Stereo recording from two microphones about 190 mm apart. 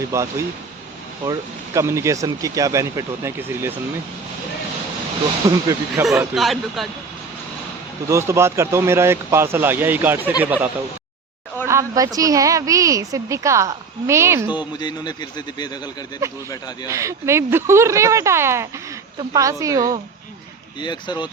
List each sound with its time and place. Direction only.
0.1 s speech: 15° right (ahead or behind)
5.5 s speech: 20° right (ahead or behind)
6.1 s speech: centre (ahead or behind)
8.0 s speech: 15° right (ahead or behind)
11.7 s speech: 15° right (ahead or behind)
14.5 s a man's voice: 25° left (ahead or behind)
16.9 s speech: 15° right (ahead or behind)
20.8 s a man's voice: 25° left (ahead or behind)